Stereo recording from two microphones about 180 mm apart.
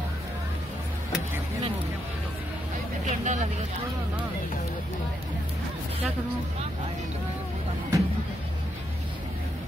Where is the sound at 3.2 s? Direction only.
40° right (ahead or behind).